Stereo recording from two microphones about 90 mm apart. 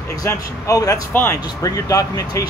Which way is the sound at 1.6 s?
40° left (ahead or behind).